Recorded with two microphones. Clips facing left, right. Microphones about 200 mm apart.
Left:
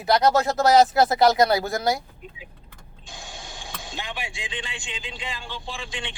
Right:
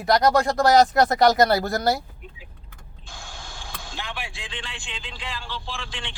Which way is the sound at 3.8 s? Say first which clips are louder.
Left 1 dB; 15° left (ahead or behind).